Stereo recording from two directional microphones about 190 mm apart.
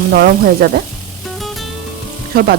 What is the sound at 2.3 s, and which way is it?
Speech, 55° right (ahead or behind).